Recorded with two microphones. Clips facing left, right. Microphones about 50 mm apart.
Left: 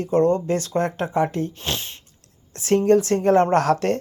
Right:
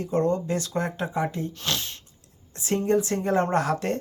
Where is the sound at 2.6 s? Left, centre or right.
Left.